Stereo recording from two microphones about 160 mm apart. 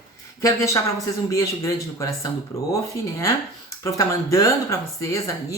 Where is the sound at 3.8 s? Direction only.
20° left (ahead or behind).